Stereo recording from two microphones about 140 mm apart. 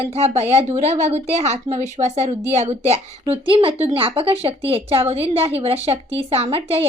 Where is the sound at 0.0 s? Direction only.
50° right (ahead or behind).